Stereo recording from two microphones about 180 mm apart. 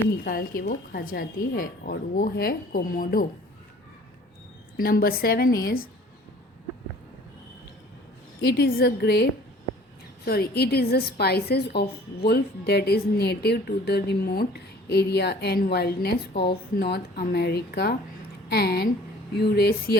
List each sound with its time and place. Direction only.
0.3 s speech: 55° left (ahead or behind)
4.8 s a woman's voice: 55° left (ahead or behind)
8.4 s a woman's voice: 65° left (ahead or behind)
10.2 s a woman's voice: 60° left (ahead or behind)